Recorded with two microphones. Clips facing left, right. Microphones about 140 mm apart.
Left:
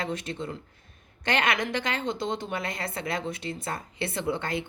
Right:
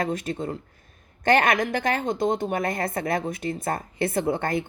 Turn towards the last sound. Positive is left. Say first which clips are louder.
# right 5 dB
turn(degrees=-50)  # may be behind; listen again after turning